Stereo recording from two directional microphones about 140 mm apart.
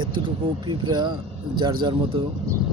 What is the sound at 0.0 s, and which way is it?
Speech, 35° right (ahead or behind).